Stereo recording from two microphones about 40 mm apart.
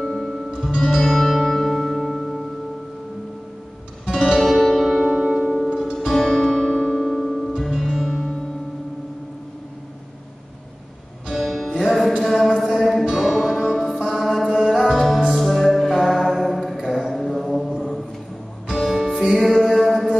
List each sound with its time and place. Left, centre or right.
0.0 s music: centre
4.1 s music: centre
4.9 s music: centre
5.5 s music: left
5.9 s music: centre
7.5 s music: centre
11.2 s music: centre